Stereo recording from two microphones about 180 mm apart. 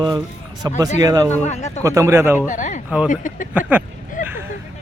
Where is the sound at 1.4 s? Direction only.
40° left (ahead or behind).